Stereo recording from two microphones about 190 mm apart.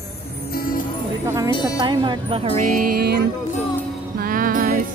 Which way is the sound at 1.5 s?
20° left (ahead or behind).